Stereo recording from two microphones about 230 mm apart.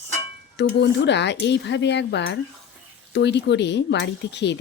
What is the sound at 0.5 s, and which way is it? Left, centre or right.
Speech, left.